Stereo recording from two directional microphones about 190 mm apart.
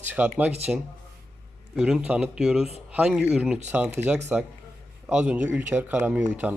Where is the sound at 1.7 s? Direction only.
5° right (ahead or behind).